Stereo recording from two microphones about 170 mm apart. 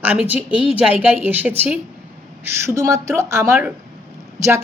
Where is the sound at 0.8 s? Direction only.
10° right (ahead or behind).